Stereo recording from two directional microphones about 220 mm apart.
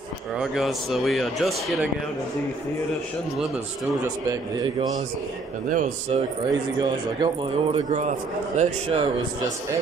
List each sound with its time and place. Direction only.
0.4 s speech: centre (ahead or behind)
4.7 s speech: 30° right (ahead or behind)
6.8 s a man's voice: 20° right (ahead or behind)